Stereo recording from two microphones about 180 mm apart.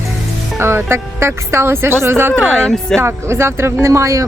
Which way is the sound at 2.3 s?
5° left (ahead or behind).